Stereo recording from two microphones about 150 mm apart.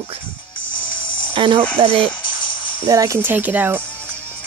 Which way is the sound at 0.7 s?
30° left (ahead or behind).